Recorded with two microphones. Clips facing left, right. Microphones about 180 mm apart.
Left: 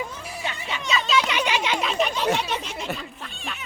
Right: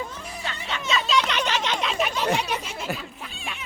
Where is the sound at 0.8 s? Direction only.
Centre (ahead or behind).